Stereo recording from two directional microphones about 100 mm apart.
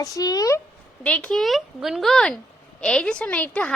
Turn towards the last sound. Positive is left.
turn(degrees=15)  # may be behind; listen again after turning